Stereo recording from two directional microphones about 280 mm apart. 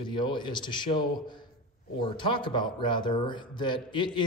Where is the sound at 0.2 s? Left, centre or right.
Centre.